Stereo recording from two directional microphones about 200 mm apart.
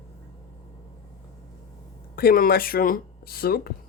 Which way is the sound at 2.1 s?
45° left (ahead or behind).